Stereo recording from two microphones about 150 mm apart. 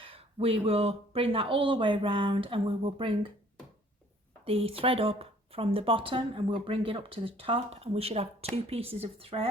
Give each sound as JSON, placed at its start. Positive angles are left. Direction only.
{"t": 0.0, "sound": "speech", "side_deg": -40}
{"t": 4.4, "sound": "speech", "side_deg": -40}